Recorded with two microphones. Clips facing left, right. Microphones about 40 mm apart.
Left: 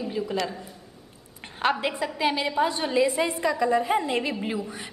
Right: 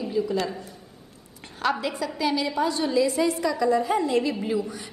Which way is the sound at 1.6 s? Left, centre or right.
Left.